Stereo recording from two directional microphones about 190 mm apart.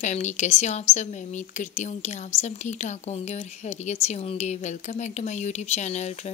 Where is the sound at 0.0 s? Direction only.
35° left (ahead or behind).